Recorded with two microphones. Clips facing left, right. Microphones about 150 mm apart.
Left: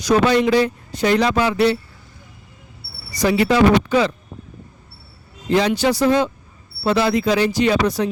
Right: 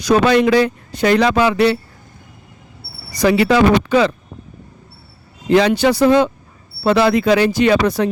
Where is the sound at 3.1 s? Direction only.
65° right (ahead or behind).